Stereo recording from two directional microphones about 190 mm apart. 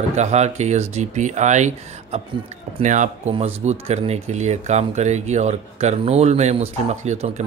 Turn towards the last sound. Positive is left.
turn(degrees=-35)  # may be behind; listen again after turning